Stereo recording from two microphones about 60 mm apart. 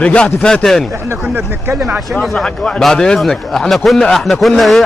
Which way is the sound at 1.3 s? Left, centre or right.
Right.